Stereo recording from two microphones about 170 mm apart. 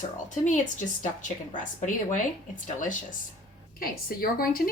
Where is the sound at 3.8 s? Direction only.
60° left (ahead or behind).